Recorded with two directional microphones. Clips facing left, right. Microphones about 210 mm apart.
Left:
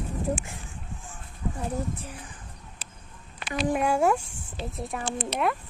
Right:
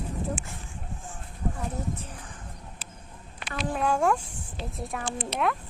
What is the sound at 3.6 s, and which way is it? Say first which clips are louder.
Speech: left 2 dB; 15° left (ahead or behind).